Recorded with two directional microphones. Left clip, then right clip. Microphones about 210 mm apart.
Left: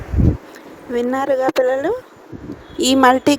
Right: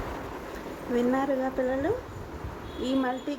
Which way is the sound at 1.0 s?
50° left (ahead or behind).